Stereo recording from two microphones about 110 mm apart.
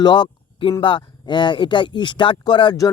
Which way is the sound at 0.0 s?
45° left (ahead or behind).